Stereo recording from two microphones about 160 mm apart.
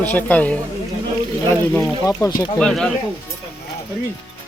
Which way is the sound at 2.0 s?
20° left (ahead or behind).